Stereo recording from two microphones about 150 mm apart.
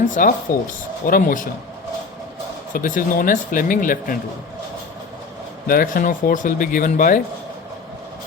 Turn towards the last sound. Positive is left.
turn(degrees=65)  # may be behind; listen again after turning